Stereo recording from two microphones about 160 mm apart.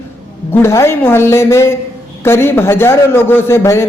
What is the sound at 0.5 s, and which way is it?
A man's voice, 15° left (ahead or behind).